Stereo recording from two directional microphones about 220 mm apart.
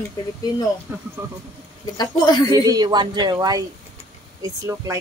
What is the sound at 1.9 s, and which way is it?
Speech, 20° left (ahead or behind).